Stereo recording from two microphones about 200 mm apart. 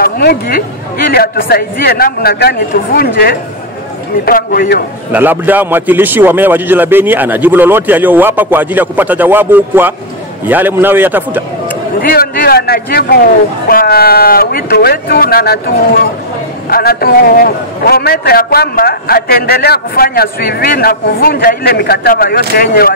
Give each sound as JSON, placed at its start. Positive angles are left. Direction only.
{"t": 0.0, "sound": "a man's voice", "side_deg": 50}
{"t": 5.1, "sound": "a man's voice", "side_deg": -10}
{"t": 12.0, "sound": "a man's voice", "side_deg": 50}
{"t": 16.6, "sound": "a man's voice", "side_deg": 50}